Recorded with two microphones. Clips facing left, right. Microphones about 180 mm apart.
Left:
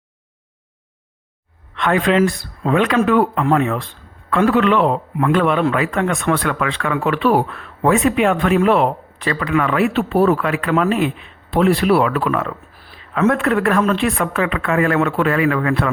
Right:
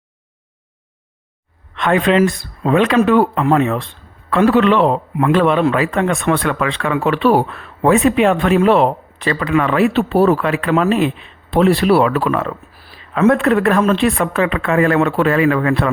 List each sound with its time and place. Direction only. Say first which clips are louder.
1.7 s a man's voice: right 2 dB; 20° right (ahead or behind)